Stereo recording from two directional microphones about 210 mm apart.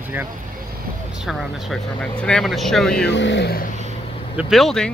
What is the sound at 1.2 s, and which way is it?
Speech, centre (ahead or behind).